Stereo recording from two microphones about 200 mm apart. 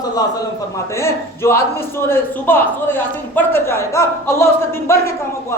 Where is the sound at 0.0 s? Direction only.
20° left (ahead or behind).